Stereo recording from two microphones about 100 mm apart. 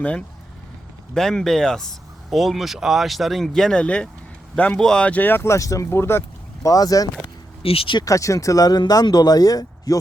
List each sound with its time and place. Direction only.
0.0 s speech: 15° left (ahead or behind)
6.7 s speech: 35° left (ahead or behind)
7.6 s speech: 70° left (ahead or behind)
8.0 s speech: 35° left (ahead or behind)